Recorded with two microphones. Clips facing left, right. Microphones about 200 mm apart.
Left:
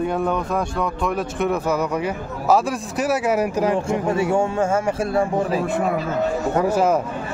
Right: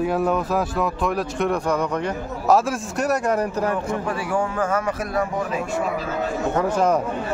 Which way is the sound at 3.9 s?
25° left (ahead or behind).